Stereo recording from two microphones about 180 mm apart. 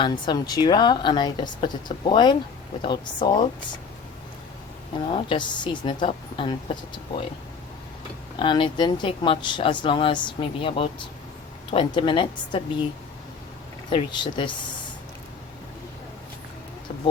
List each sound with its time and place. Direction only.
0.0 s speech: 25° left (ahead or behind)
5.0 s speech: 30° left (ahead or behind)
8.4 s speech: 25° left (ahead or behind)
13.9 s speech: 25° left (ahead or behind)
16.9 s a sound: 45° left (ahead or behind)